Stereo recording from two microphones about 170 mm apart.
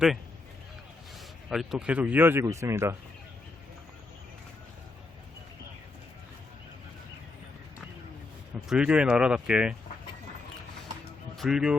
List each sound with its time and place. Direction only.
1.5 s speech: centre (ahead or behind)
8.7 s speech: 5° right (ahead or behind)
11.3 s speech: 5° right (ahead or behind)